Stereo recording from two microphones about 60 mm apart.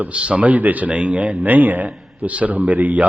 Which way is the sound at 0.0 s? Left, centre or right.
Centre.